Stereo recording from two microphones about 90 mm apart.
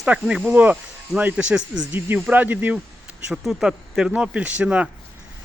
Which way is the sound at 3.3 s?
5° right (ahead or behind).